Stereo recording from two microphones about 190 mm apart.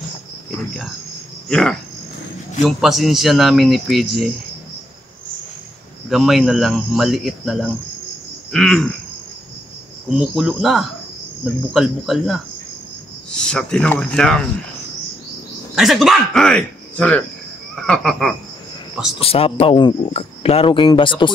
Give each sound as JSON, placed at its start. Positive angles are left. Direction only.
{"t": 1.5, "sound": "speech", "side_deg": 5}
{"t": 6.0, "sound": "speech", "side_deg": 0}
{"t": 10.1, "sound": "speech", "side_deg": -5}
{"t": 15.7, "sound": "speech", "side_deg": 0}
{"t": 19.1, "sound": "speech", "side_deg": 30}